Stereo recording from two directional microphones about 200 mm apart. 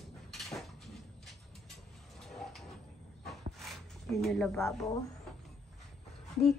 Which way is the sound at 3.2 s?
Centre (ahead or behind).